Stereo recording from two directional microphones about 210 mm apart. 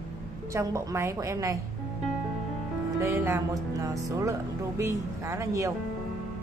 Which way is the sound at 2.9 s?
10° right (ahead or behind).